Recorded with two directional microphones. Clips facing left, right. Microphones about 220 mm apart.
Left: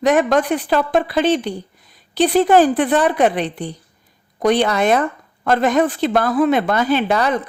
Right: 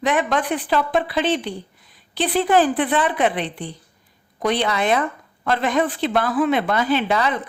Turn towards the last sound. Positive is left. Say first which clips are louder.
# left 3 dB
turn(degrees=45)  # may be behind; listen again after turning